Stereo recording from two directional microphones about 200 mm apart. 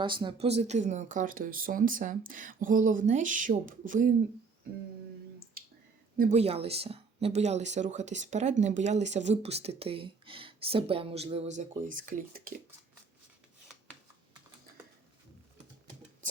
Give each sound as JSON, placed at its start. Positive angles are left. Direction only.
{"t": 0.0, "sound": "speech", "side_deg": -25}
{"t": 6.1, "sound": "speech", "side_deg": -40}